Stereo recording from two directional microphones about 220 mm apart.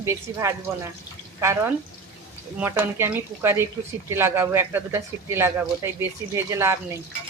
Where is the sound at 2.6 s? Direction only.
10° right (ahead or behind).